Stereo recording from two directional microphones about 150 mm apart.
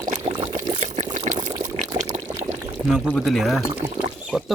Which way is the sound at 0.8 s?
50° right (ahead or behind).